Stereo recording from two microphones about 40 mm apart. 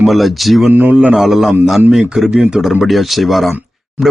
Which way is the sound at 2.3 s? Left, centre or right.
Right.